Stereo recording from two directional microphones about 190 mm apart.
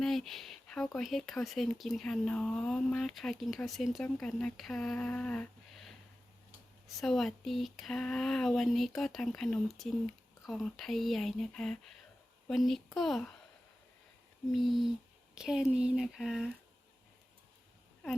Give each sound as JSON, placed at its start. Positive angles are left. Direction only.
{"t": 0.0, "sound": "speech", "side_deg": 0}
{"t": 14.5, "sound": "speech", "side_deg": 0}